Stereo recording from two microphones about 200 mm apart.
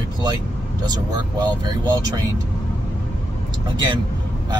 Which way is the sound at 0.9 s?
20° right (ahead or behind).